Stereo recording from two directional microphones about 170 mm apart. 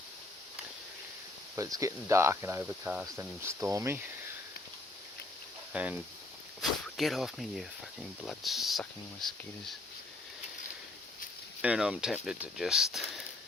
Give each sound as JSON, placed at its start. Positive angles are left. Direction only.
{"t": 1.5, "sound": "speech", "side_deg": -20}
{"t": 5.7, "sound": "speech", "side_deg": -10}
{"t": 11.6, "sound": "speech", "side_deg": -5}